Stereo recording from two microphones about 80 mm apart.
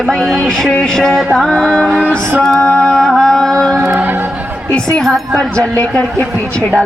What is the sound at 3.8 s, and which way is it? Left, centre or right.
Choir, right.